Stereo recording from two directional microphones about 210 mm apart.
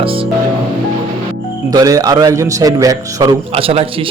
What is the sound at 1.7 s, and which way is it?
Speech, 15° right (ahead or behind).